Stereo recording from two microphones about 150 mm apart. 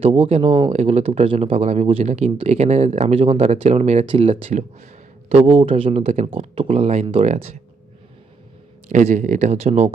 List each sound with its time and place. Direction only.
0.0 s speech: 30° right (ahead or behind)
0.7 s speech: 45° right (ahead or behind)
8.9 s speech: 55° right (ahead or behind)